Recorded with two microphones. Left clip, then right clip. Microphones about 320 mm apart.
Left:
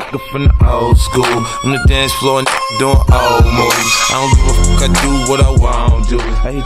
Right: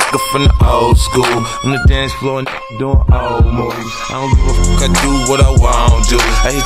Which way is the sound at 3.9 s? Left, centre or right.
Left.